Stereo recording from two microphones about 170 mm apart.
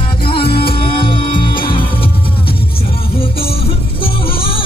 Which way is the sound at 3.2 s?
35° left (ahead or behind).